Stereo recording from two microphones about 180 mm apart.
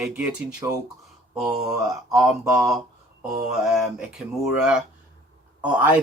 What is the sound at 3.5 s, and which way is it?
Speech, centre (ahead or behind).